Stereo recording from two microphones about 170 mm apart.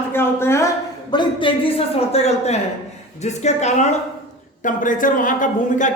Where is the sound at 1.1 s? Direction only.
30° left (ahead or behind).